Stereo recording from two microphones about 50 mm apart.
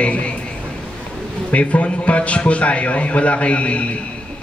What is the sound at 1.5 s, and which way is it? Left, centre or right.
A man's voice, left.